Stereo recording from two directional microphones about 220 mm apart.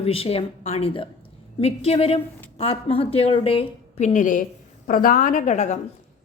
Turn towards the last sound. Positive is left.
turn(degrees=35)  # may be behind; listen again after turning